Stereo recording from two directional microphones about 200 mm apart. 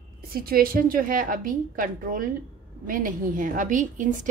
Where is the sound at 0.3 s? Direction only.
45° right (ahead or behind).